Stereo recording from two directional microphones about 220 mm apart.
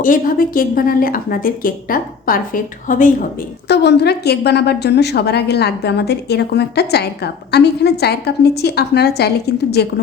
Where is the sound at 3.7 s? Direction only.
50° left (ahead or behind).